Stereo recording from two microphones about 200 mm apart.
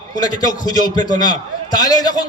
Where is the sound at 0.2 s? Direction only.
20° left (ahead or behind).